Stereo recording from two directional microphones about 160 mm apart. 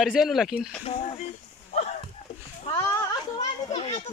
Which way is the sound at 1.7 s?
45° left (ahead or behind).